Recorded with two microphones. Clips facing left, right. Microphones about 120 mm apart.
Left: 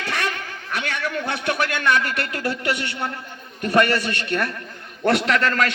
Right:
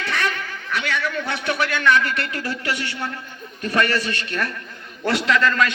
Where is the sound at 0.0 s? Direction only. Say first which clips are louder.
Right 1 dB; 40° left (ahead or behind).